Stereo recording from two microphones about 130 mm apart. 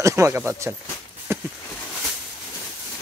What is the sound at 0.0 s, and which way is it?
Speech, 20° right (ahead or behind).